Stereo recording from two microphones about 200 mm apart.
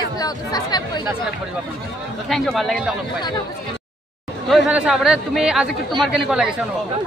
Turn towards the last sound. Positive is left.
turn(degrees=-5)  # may be behind; listen again after turning